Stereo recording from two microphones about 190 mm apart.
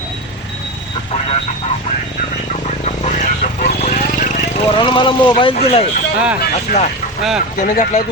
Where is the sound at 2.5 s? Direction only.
35° left (ahead or behind).